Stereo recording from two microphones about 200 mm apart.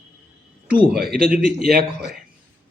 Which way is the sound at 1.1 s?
50° right (ahead or behind).